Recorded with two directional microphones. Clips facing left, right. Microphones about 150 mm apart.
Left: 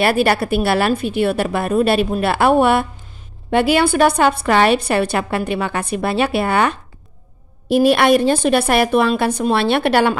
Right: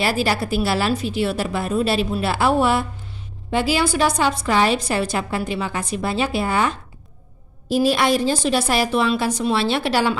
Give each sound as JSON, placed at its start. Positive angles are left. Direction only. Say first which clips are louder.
{"t": 0.0, "sound": "a woman's voice", "louder": "left 5 dB", "side_deg": 60}